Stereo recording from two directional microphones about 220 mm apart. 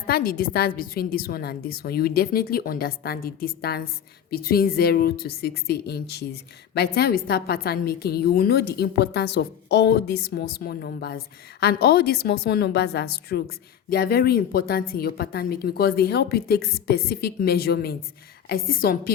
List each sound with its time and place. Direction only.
0.1 s a woman's voice: 40° left (ahead or behind)